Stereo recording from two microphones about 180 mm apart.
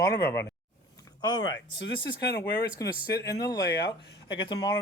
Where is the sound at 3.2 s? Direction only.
20° left (ahead or behind).